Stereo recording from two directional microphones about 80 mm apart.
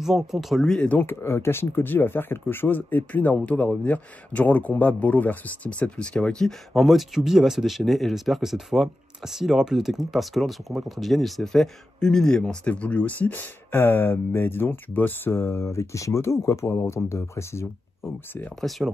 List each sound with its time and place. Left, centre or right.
0.0 s speech: centre
0.7 s speech: left
1.2 s speech: left
18.6 s speech: centre